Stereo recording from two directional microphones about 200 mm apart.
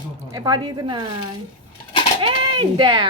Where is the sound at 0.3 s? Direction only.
15° right (ahead or behind).